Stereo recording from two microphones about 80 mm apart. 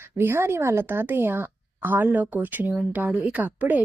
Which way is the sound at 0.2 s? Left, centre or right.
Right.